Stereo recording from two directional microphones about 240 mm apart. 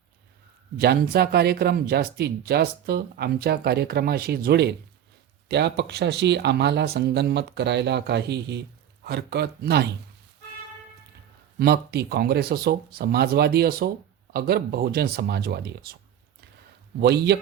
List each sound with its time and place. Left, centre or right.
0.8 s speech: right
11.6 s speech: right
17.0 s speech: right